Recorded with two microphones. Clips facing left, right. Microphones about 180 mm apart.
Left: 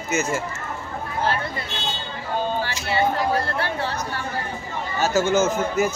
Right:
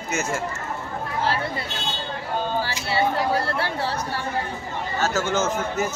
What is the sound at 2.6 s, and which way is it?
Speech, 30° right (ahead or behind).